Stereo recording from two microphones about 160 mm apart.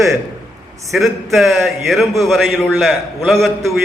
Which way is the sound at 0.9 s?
Centre (ahead or behind).